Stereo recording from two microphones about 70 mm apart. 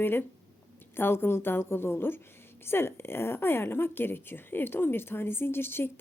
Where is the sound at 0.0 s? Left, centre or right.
Left.